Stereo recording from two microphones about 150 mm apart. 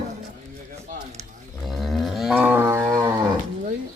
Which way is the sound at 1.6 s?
Centre (ahead or behind).